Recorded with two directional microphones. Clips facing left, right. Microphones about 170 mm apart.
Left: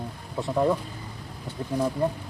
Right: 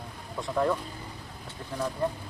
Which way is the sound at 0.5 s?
15° left (ahead or behind).